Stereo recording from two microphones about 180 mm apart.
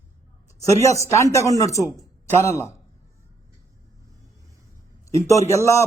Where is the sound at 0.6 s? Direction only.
15° left (ahead or behind).